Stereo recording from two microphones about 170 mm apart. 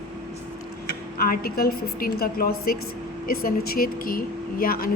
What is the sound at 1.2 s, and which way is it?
A woman's voice, 65° left (ahead or behind).